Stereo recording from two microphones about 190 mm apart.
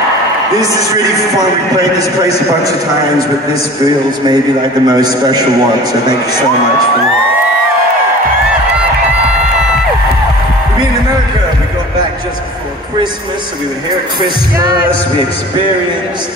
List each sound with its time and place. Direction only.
1.8 s a man's voice: 20° right (ahead or behind)
4.3 s a man's voice: 20° right (ahead or behind)